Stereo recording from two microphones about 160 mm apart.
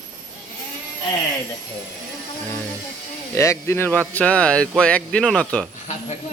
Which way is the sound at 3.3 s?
20° left (ahead or behind).